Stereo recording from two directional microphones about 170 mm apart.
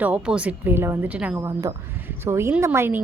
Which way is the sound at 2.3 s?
15° right (ahead or behind).